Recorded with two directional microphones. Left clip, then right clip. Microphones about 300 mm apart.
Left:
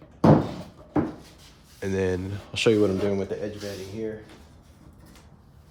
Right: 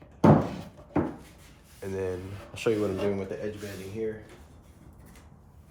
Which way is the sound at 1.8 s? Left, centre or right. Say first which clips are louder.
Left 6 dB; left.